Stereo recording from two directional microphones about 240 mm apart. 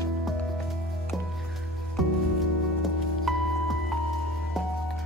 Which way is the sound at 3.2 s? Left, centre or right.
Centre.